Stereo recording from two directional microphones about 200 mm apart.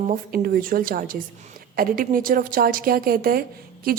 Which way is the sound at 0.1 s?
45° right (ahead or behind).